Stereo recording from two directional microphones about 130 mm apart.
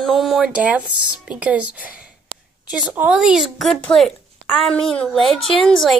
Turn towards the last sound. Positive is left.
turn(degrees=0)  # may be behind; listen again after turning